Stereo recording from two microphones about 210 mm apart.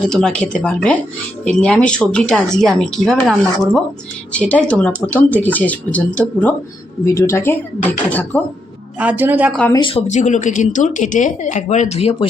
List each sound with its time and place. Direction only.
0.0 s speech: 5° left (ahead or behind)
9.0 s speech: 10° right (ahead or behind)
9.7 s speech: 25° left (ahead or behind)
10.1 s speech: 35° left (ahead or behind)